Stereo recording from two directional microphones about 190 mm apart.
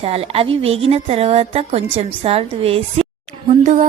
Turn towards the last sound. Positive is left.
turn(degrees=-40)  # may be behind; listen again after turning